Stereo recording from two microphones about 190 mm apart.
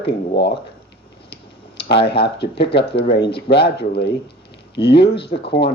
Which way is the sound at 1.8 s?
65° left (ahead or behind).